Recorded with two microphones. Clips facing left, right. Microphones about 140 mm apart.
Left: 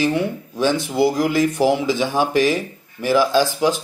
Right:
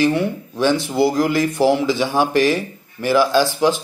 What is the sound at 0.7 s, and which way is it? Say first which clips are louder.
Speech: right 2 dB; 25° right (ahead or behind).